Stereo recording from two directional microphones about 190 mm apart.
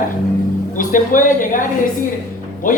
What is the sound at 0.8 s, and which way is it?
Speech, 45° left (ahead or behind).